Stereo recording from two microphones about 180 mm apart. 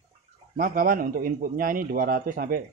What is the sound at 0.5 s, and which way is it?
A man's voice, 50° right (ahead or behind).